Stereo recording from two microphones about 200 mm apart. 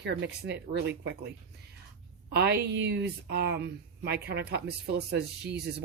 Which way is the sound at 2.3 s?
55° right (ahead or behind).